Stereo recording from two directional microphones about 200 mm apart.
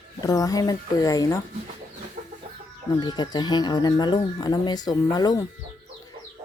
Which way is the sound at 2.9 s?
20° left (ahead or behind).